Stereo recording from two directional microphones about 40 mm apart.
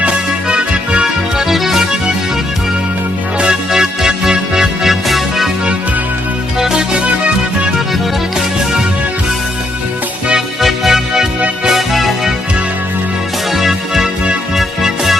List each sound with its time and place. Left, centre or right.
0.0 s music: right
1.4 s music: centre
3.7 s music: centre
5.0 s music: centre
6.6 s music: centre
6.9 s music: right
10.6 s music: centre
11.3 s music: right
11.7 s music: centre
13.5 s music: centre